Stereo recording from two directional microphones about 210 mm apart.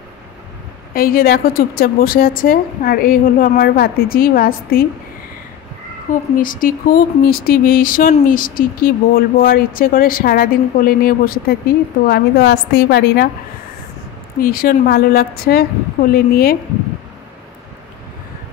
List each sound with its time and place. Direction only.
0.9 s speech: 45° left (ahead or behind)
6.0 s a woman's voice: 40° left (ahead or behind)
14.4 s speech: 45° left (ahead or behind)